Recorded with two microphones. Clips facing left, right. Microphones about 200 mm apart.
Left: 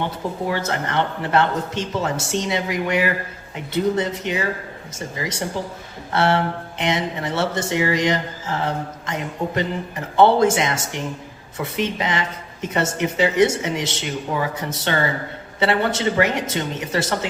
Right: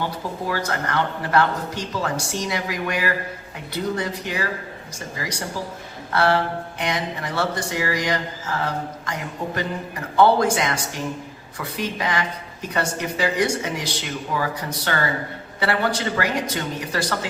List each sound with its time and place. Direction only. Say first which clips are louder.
0.4 s speech: left 1 dB; 25° left (ahead or behind)